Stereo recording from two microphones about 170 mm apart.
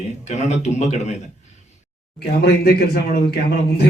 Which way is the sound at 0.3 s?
45° left (ahead or behind).